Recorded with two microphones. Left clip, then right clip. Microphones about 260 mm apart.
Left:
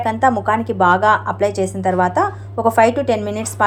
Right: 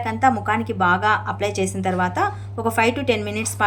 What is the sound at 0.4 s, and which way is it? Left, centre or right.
Speech, centre.